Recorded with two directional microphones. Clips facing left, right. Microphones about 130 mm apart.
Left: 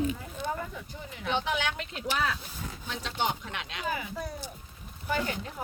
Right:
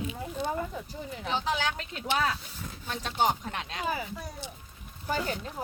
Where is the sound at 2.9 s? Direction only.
45° right (ahead or behind).